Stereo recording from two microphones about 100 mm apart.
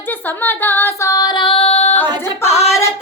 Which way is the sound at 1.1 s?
40° left (ahead or behind).